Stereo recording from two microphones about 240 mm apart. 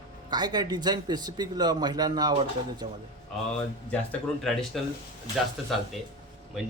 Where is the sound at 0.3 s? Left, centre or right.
Centre.